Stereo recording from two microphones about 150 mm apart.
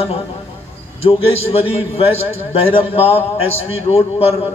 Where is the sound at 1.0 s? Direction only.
40° left (ahead or behind).